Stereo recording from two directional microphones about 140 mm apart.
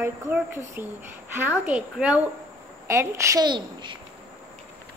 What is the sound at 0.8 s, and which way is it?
A woman's voice, 15° right (ahead or behind).